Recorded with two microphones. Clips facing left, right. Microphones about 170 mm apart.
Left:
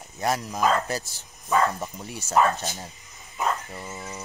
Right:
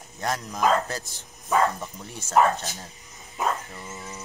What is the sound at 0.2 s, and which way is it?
Speech, 10° left (ahead or behind).